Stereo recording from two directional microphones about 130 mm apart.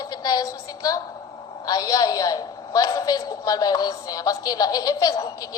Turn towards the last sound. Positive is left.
turn(degrees=30)  # may be behind; listen again after turning